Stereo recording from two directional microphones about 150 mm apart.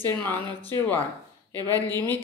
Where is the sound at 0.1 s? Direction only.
15° left (ahead or behind).